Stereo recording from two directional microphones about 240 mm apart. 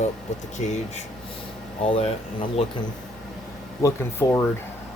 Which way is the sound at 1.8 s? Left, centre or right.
Left.